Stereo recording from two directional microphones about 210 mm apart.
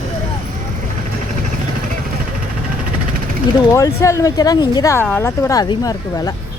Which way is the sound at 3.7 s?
15° left (ahead or behind).